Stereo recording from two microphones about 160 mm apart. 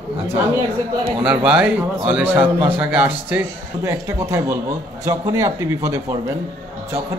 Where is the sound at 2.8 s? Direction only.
10° right (ahead or behind).